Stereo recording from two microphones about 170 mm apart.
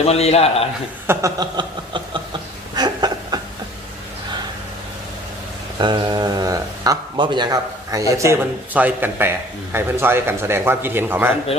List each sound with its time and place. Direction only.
0.0 s a man's voice: 35° left (ahead or behind)
1.0 s a sound: 15° right (ahead or behind)
5.8 s speech: 25° right (ahead or behind)